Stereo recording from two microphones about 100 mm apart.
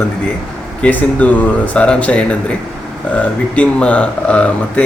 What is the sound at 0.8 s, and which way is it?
Speech, 15° left (ahead or behind).